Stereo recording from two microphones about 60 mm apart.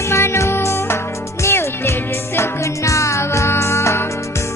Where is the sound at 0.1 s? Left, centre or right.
Left.